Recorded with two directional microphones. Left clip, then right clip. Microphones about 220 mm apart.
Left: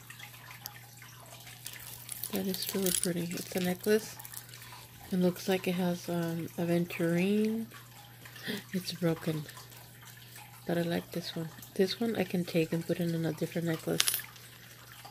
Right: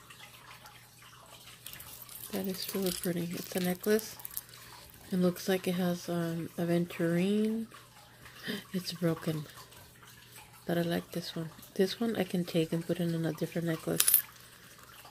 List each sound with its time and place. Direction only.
2.3 s speech: centre (ahead or behind)
5.1 s speech: 5° right (ahead or behind)
10.7 s speech: 5° right (ahead or behind)
13.9 s a sound: 25° right (ahead or behind)